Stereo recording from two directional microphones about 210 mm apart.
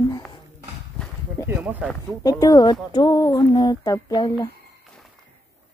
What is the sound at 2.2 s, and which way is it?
Speech, 15° left (ahead or behind).